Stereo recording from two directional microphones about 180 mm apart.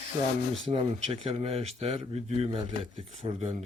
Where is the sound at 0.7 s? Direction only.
30° right (ahead or behind).